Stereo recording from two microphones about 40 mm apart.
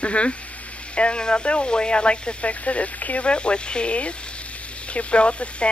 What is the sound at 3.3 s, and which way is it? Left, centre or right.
Speech, left.